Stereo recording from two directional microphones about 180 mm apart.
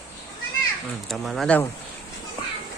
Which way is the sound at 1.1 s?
Centre (ahead or behind).